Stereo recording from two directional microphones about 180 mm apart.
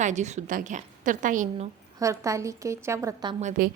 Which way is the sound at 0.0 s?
40° right (ahead or behind).